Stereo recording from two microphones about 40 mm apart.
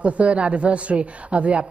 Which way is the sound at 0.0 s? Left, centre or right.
Right.